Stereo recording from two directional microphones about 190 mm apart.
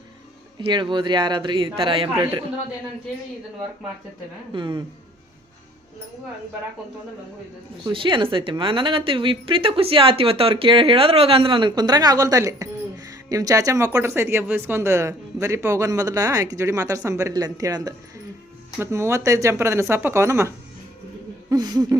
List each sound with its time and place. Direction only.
0.6 s a woman's voice: 25° right (ahead or behind)
4.5 s a woman's voice: 25° right (ahead or behind)
7.9 s a woman's voice: 25° right (ahead or behind)
21.5 s a woman's voice: 20° right (ahead or behind)